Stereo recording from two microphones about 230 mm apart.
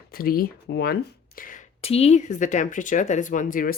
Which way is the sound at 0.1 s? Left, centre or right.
Left.